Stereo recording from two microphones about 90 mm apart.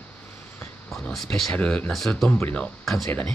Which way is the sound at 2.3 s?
15° left (ahead or behind).